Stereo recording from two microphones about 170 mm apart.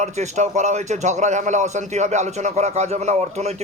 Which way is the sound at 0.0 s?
45° right (ahead or behind).